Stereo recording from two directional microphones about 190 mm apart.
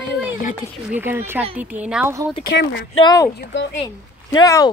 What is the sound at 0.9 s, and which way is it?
Speech, 10° right (ahead or behind).